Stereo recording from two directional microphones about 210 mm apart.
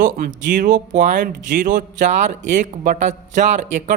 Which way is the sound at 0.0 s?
35° right (ahead or behind).